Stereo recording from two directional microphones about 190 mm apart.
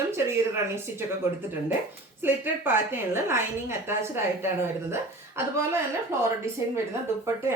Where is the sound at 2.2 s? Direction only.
10° right (ahead or behind).